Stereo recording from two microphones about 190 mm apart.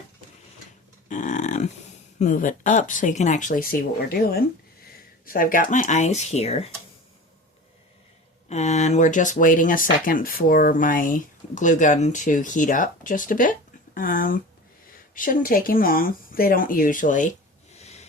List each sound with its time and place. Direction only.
1.0 s a sound: 40° left (ahead or behind)
2.1 s speech: 40° left (ahead or behind)
8.4 s speech: 35° left (ahead or behind)
17.7 s snort: 35° left (ahead or behind)